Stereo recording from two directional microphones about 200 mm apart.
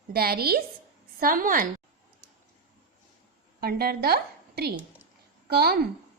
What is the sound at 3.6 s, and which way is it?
A woman's voice, 50° right (ahead or behind).